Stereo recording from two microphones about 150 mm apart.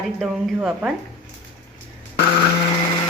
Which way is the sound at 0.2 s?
5° right (ahead or behind).